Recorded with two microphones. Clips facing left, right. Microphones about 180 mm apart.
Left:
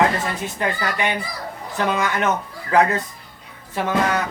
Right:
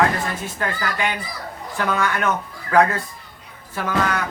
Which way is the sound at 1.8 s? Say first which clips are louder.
Left 1 dB; 20° left (ahead or behind).